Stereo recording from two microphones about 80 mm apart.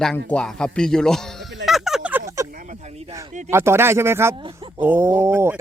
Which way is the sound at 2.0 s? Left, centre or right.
Right.